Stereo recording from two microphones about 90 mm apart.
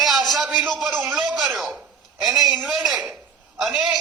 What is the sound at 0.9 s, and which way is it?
Speech, 25° right (ahead or behind).